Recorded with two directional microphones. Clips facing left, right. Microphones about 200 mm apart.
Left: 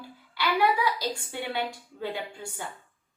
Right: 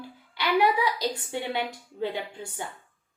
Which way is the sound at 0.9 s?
20° right (ahead or behind).